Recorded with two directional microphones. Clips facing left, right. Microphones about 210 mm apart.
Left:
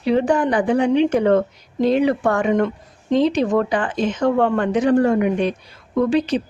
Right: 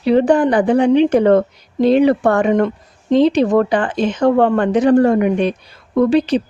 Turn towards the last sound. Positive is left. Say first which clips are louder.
# right 4 dB
turn(degrees=-35)  # may be behind; listen again after turning